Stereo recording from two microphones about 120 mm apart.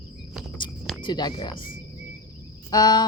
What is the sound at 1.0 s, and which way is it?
A woman's voice, 35° left (ahead or behind).